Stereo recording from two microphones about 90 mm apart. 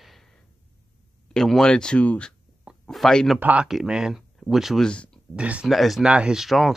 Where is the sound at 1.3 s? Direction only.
5° left (ahead or behind).